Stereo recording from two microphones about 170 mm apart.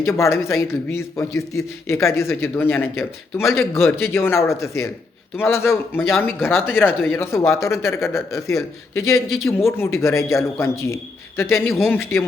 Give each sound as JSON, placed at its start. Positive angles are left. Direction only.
{"t": 0.0, "sound": "a man's voice", "side_deg": 15}